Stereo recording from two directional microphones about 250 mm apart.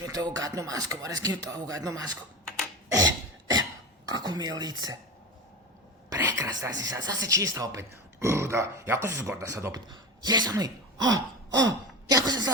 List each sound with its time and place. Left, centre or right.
0.1 s speech: centre
2.9 s cough: centre
4.1 s speech: centre
6.1 s speech: centre
11.0 s gasp: centre
12.0 s speech: centre